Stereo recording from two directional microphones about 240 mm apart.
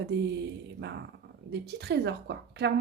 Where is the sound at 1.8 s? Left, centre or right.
Right.